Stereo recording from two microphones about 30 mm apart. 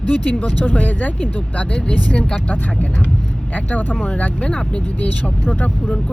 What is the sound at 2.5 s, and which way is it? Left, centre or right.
Speech, left.